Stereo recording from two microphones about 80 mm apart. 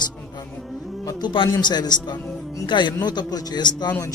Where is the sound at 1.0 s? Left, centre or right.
Left.